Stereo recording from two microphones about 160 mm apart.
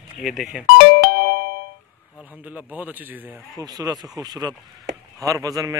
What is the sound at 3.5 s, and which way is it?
A man's voice, 25° right (ahead or behind).